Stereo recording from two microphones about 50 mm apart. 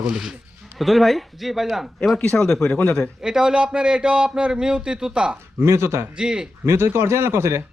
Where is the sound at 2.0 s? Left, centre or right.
Centre.